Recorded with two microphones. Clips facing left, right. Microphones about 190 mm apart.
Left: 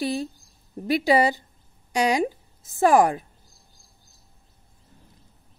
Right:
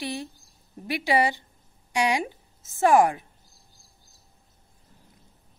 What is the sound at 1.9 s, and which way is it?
A woman's voice, 35° left (ahead or behind).